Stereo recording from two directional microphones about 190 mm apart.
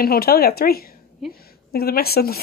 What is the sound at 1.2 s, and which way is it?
Speech, centre (ahead or behind).